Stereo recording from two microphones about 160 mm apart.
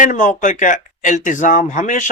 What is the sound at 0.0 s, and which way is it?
Speech, 55° left (ahead or behind).